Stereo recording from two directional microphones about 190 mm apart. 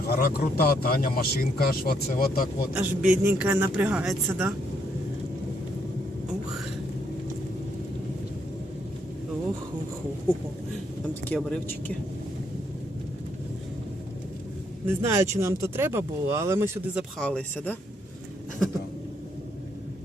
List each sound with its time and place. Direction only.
0.1 s speech: 50° left (ahead or behind)
2.7 s speech: 10° right (ahead or behind)
11.1 s speech: 5° left (ahead or behind)
14.8 s speech: 15° right (ahead or behind)
17.2 s speech: 5° left (ahead or behind)